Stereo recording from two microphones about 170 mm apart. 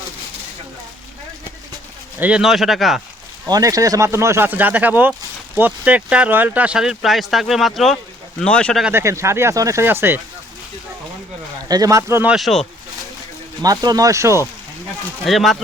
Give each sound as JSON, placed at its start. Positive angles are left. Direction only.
{"t": 2.1, "sound": "speech", "side_deg": -10}
{"t": 3.4, "sound": "speech", "side_deg": -20}
{"t": 8.8, "sound": "speech", "side_deg": -15}
{"t": 11.7, "sound": "speech", "side_deg": -20}
{"t": 12.3, "sound": "speech", "side_deg": 0}
{"t": 13.6, "sound": "speech", "side_deg": -20}
{"t": 15.2, "sound": "speech", "side_deg": 0}